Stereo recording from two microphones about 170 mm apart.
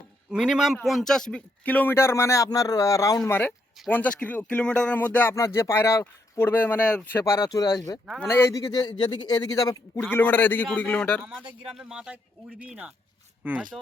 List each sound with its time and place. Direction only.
0.3 s speech: 5° right (ahead or behind)